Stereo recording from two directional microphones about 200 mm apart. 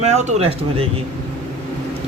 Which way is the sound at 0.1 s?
35° right (ahead or behind).